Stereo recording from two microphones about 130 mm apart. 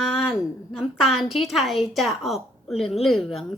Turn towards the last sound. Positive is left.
turn(degrees=0)  # may be behind; listen again after turning